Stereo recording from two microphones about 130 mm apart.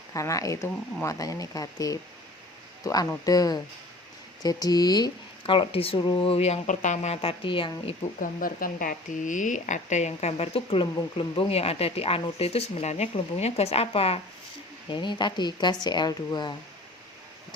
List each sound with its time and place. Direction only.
0.1 s speech: 25° left (ahead or behind); by 7.9 s 40° left (ahead or behind)
8.2 s speech: 90° left; by 14.2 s 50° left (ahead or behind)
14.8 s speech: 35° left (ahead or behind)